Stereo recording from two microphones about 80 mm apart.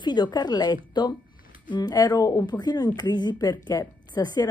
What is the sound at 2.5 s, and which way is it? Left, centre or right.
A woman's voice, left.